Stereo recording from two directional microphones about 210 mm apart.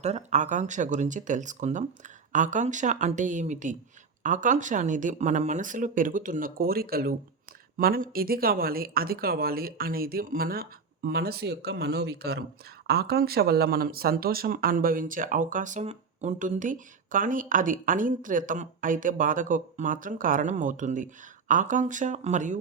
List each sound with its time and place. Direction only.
0.0 s speech: 30° right (ahead or behind)